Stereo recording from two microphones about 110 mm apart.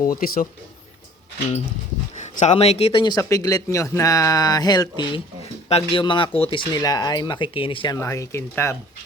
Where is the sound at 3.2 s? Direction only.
30° left (ahead or behind).